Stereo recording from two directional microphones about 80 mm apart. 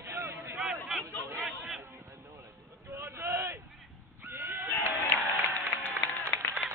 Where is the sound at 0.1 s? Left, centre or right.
Right.